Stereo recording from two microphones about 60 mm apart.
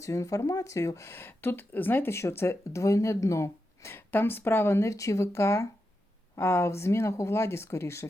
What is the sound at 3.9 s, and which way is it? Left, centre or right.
Speech, left.